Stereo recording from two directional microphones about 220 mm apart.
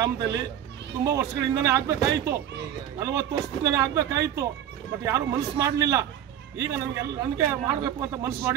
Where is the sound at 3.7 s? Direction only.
15° right (ahead or behind).